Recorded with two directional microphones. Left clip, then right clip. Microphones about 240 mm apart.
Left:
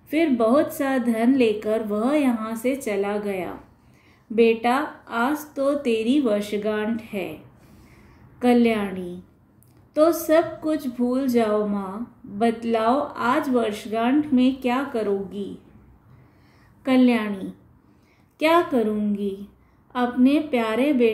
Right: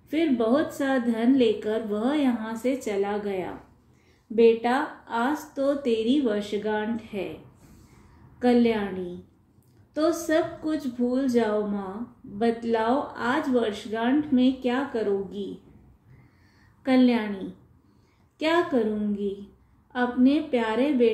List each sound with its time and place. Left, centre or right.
0.1 s a woman's voice: left
8.4 s a woman's voice: left
16.8 s a woman's voice: centre